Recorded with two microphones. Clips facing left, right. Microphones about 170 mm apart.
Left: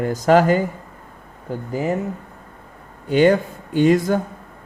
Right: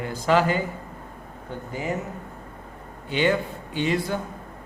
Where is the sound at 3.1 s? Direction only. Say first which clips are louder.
Left 8 dB; 45° left (ahead or behind).